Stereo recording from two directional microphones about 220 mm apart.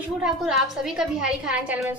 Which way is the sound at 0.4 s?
Centre (ahead or behind).